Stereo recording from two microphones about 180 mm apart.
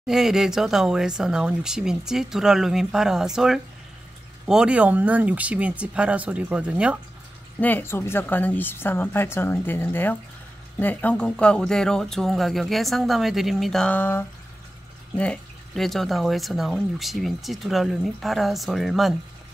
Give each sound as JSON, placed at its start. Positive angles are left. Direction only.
{"t": 0.0, "sound": "speech", "side_deg": 0}
{"t": 7.6, "sound": "a woman's voice", "side_deg": 10}